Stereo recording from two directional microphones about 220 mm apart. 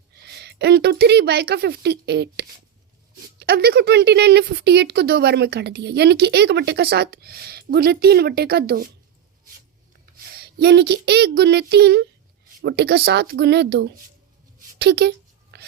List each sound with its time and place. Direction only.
0.2 s a woman's voice: 50° right (ahead or behind)
10.3 s speech: 45° right (ahead or behind)
15.5 s whispering: 45° right (ahead or behind)